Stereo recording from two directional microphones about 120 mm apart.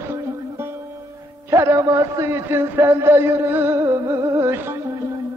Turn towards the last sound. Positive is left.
turn(degrees=-20)  # may be behind; listen again after turning